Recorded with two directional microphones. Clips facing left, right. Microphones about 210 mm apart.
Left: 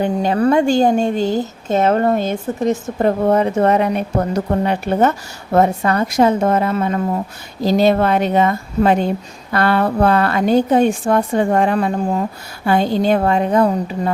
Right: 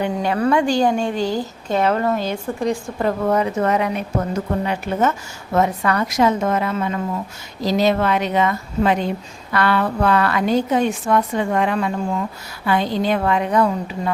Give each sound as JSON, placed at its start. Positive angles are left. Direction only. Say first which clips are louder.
{"t": 0.0, "sound": "a woman's voice", "louder": "left 4 dB", "side_deg": 35}
{"t": 1.2, "sound": "speech", "louder": "left 4 dB", "side_deg": 20}
{"t": 2.1, "sound": "a woman's voice", "louder": "left 4 dB", "side_deg": 50}
{"t": 2.6, "sound": "a woman's voice", "louder": "left 5 dB", "side_deg": 20}